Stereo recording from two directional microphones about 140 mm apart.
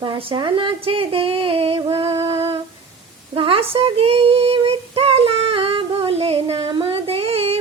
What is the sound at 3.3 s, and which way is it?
Child singing, 40° right (ahead or behind).